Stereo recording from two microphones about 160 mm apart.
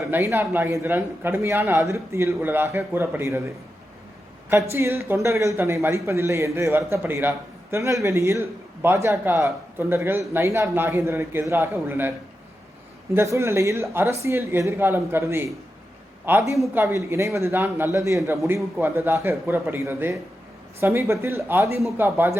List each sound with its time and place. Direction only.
0.1 s speech: 15° right (ahead or behind)
4.7 s speech: 15° right (ahead or behind)
13.1 s speech: 20° right (ahead or behind)